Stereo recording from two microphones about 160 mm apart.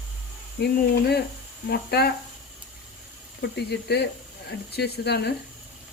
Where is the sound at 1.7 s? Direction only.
80° left.